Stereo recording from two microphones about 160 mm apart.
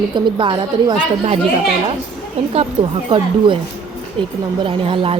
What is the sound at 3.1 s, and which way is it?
Speech, 30° right (ahead or behind).